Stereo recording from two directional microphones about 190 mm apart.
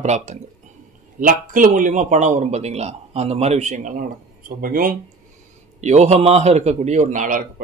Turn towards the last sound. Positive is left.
turn(degrees=-45)  # may be behind; listen again after turning